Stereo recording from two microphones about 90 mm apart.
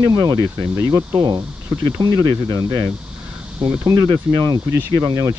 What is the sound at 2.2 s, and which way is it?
Speech, 30° right (ahead or behind).